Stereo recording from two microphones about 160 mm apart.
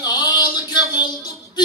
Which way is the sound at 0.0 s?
25° left (ahead or behind).